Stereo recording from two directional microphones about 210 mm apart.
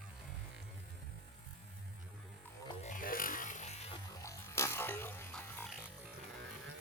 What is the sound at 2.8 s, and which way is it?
Music, 40° left (ahead or behind).